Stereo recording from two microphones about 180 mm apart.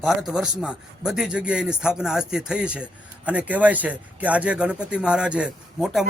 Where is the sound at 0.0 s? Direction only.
Centre (ahead or behind).